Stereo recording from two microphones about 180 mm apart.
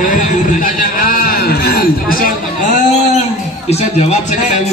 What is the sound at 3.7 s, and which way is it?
Speech, 35° left (ahead or behind).